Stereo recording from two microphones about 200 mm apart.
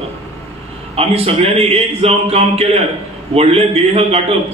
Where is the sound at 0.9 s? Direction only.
30° right (ahead or behind).